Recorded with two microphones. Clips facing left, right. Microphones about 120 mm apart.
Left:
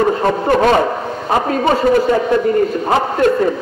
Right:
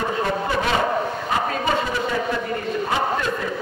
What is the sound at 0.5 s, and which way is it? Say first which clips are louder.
A man's voice: left 11 dB; 50° left (ahead or behind).